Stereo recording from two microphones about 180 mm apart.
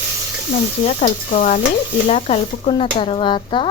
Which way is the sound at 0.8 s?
40° left (ahead or behind).